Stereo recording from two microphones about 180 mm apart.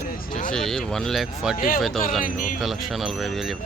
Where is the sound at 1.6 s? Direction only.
50° left (ahead or behind).